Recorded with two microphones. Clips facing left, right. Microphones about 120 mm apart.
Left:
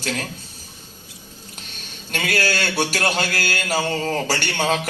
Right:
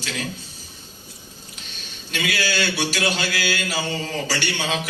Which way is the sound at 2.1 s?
50° left (ahead or behind).